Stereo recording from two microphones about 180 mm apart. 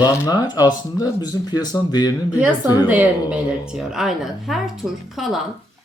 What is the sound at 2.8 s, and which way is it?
A woman's voice, 10° right (ahead or behind).